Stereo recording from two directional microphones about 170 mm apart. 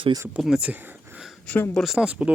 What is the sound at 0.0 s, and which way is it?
Speech, 25° right (ahead or behind).